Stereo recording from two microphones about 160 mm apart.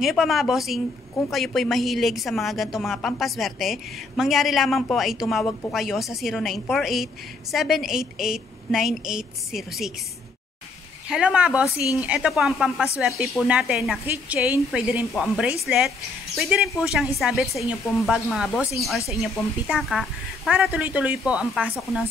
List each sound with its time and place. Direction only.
0.0 s a woman's voice: centre (ahead or behind)
11.1 s speech: 5° right (ahead or behind)
11.6 s a woman's voice: 20° left (ahead or behind)
12.0 s a woman's voice: 5° right (ahead or behind)